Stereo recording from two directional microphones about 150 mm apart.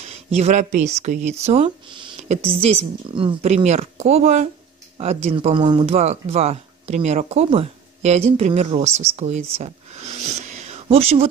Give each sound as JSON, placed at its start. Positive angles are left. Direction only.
{"t": 0.0, "sound": "speech", "side_deg": -45}
{"t": 2.2, "sound": "speech", "side_deg": -45}